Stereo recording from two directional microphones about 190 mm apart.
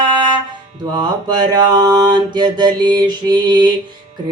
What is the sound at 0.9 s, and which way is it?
Mantra, 20° right (ahead or behind).